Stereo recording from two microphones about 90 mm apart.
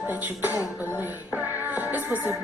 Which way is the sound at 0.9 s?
20° right (ahead or behind).